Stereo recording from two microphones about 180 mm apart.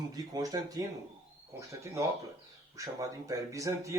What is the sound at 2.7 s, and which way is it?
Speech, 20° right (ahead or behind).